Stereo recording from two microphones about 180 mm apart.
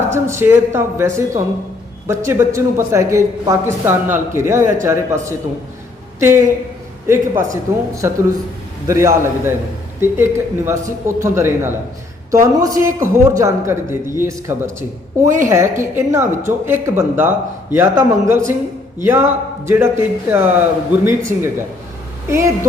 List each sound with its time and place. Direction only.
0.1 s speech: 15° right (ahead or behind)